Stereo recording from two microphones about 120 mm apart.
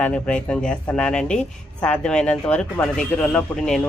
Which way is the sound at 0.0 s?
10° left (ahead or behind).